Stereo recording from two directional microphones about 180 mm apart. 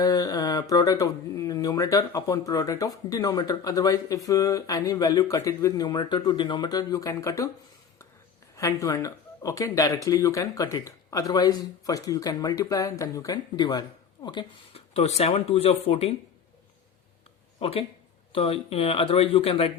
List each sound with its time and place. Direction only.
0.0 s speech: 20° left (ahead or behind)
8.5 s speech: 15° left (ahead or behind); by 16.1 s 35° left (ahead or behind)
17.6 s speech: 30° left (ahead or behind)